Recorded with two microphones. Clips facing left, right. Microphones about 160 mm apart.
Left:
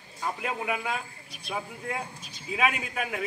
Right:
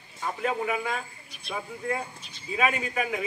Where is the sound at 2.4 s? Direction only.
5° left (ahead or behind).